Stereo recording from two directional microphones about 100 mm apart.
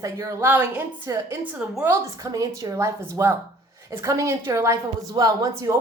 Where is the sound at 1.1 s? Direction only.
35° right (ahead or behind).